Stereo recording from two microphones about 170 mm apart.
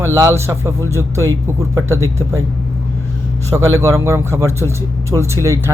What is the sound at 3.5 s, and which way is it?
A man's voice, 15° right (ahead or behind).